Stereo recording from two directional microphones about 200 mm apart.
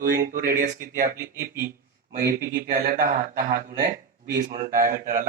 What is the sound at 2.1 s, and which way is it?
Speech, 50° right (ahead or behind).